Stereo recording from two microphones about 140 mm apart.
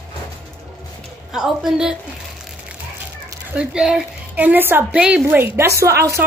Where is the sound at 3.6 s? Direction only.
5° right (ahead or behind).